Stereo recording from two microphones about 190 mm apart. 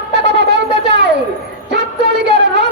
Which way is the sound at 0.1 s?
60° right (ahead or behind).